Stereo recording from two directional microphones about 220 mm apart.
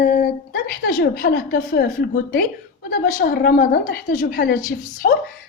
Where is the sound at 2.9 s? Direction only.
40° left (ahead or behind).